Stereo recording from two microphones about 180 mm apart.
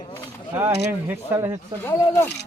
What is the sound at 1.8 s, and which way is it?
Speech, 15° left (ahead or behind).